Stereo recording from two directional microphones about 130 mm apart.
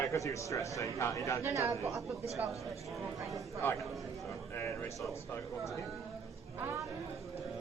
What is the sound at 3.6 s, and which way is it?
Speech, 15° left (ahead or behind).